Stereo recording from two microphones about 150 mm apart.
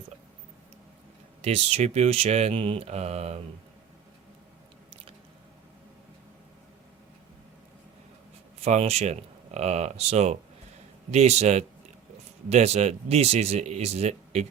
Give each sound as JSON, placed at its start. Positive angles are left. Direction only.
{"t": 1.4, "sound": "speech", "side_deg": -45}
{"t": 8.6, "sound": "speech", "side_deg": -45}